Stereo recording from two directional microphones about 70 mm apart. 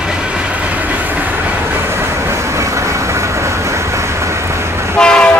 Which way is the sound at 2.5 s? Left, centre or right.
Right.